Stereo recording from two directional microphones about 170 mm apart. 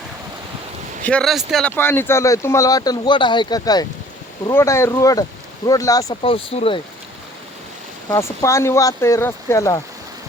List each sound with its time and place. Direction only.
1.0 s speech: 5° left (ahead or behind)
1.7 s speech: 15° left (ahead or behind)
6.2 s speech: 35° left (ahead or behind)
8.1 s speech: 15° left (ahead or behind)